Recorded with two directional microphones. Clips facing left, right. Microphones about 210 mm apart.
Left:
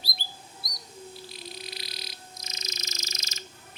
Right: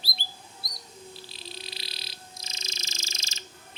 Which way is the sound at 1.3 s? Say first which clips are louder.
Left 2 dB; 30° right (ahead or behind).